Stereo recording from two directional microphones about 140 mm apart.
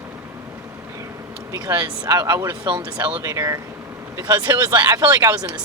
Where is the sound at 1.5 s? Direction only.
30° right (ahead or behind).